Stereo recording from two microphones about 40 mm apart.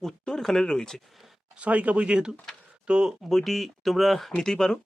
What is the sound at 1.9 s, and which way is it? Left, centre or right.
Speech, right.